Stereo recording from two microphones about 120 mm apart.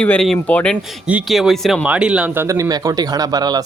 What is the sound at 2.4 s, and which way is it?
Speech, 25° right (ahead or behind).